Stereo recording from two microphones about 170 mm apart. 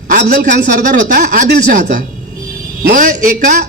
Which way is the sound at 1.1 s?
55° right (ahead or behind).